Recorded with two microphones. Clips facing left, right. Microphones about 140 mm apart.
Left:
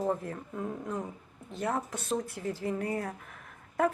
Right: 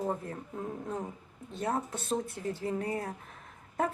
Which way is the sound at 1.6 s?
30° right (ahead or behind).